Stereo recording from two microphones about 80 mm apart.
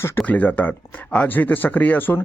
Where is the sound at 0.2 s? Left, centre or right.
Left.